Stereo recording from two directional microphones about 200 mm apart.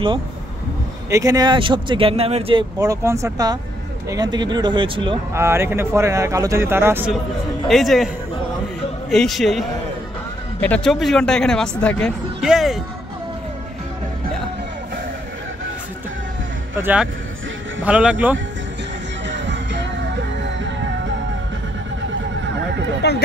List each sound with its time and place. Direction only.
1.1 s speech: 15° right (ahead or behind)
5.3 s speech: 15° right (ahead or behind)
7.6 s speech: centre (ahead or behind)
9.1 s speech: centre (ahead or behind)
16.7 s speech: 10° right (ahead or behind)
19.2 s music: 65° right (ahead or behind)
23.0 s a sound: 55° left (ahead or behind)